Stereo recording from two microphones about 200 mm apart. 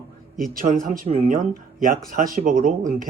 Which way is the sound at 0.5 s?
45° right (ahead or behind).